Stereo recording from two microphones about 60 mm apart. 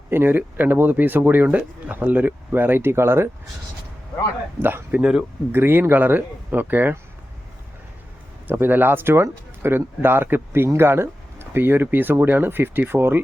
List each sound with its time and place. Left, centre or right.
0.1 s speech: right
4.6 s speech: right
8.4 s speech: right